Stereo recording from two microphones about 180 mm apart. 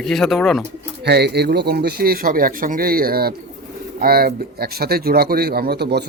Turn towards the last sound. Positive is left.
turn(degrees=-65)  # may be behind; listen again after turning